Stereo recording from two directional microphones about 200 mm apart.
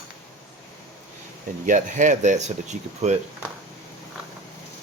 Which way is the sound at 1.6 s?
40° right (ahead or behind).